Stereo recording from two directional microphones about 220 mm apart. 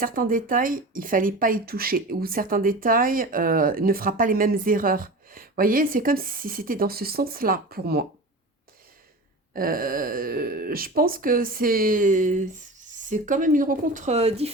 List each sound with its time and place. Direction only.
0.0 s speech: 40° right (ahead or behind)
9.5 s speech: 40° right (ahead or behind)